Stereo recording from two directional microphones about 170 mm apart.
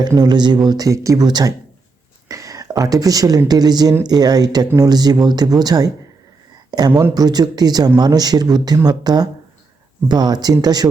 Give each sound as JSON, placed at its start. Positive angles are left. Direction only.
{"t": 0.0, "sound": "speech", "side_deg": -25}